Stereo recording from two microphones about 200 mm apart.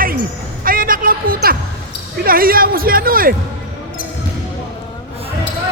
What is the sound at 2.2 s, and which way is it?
Speech, 45° right (ahead or behind).